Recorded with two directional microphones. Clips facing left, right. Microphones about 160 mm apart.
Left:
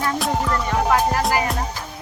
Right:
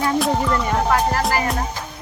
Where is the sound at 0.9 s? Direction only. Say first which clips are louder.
Left 1 dB; 10° left (ahead or behind).